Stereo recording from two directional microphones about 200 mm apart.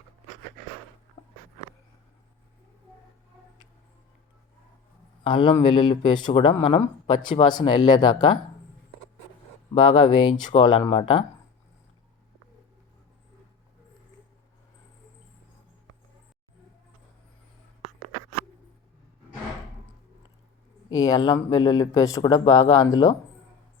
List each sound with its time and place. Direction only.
5.2 s speech: 25° left (ahead or behind)
9.9 s speech: 25° left (ahead or behind)
20.9 s speech: 20° left (ahead or behind)